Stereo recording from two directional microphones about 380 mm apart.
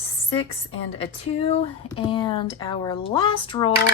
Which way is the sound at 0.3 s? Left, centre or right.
Centre.